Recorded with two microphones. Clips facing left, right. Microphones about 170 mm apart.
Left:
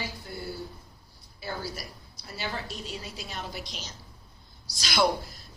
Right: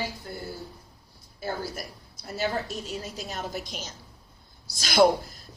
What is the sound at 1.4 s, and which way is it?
A woman's voice, 50° right (ahead or behind).